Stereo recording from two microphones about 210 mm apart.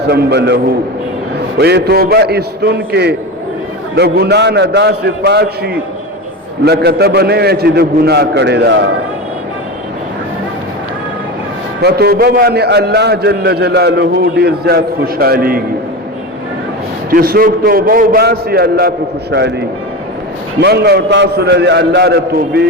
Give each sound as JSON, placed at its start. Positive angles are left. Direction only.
{"t": 0.1, "sound": "a man's voice", "side_deg": -50}
{"t": 11.8, "sound": "a man's voice", "side_deg": -50}
{"t": 17.1, "sound": "a man's voice", "side_deg": -45}